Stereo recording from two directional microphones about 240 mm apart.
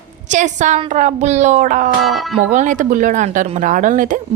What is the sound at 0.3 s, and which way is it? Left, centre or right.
A woman's voice, right.